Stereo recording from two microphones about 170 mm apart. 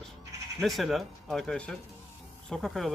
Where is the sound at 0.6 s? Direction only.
Centre (ahead or behind).